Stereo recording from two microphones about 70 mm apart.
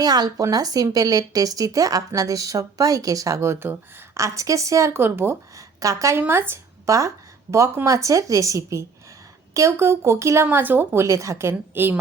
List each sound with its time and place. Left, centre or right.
0.0 s speech: right
4.2 s speech: right
4.9 s a woman's voice: right
5.5 s a woman's voice: right
6.1 s speech: right
7.9 s speech: right
9.6 s a woman's voice: right
10.4 s speech: right
11.0 s a woman's voice: right